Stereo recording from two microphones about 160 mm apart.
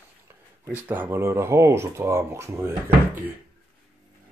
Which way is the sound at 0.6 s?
10° right (ahead or behind).